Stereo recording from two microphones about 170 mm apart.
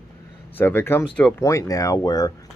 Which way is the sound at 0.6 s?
10° left (ahead or behind).